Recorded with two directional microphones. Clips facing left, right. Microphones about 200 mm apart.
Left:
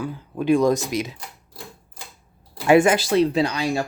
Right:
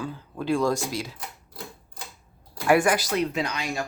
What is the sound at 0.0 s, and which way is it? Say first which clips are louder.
Speech: left 6 dB; 15° left (ahead or behind).